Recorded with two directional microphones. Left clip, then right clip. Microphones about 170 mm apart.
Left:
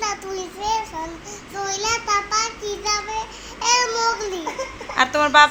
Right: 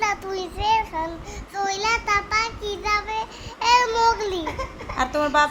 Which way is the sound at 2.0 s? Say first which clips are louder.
Left 1 dB; 35° right (ahead or behind).